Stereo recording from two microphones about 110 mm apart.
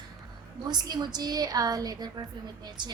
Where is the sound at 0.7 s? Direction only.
40° right (ahead or behind).